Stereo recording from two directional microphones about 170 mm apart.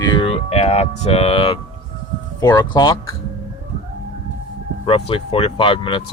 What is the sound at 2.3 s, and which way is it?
Speech, 20° left (ahead or behind).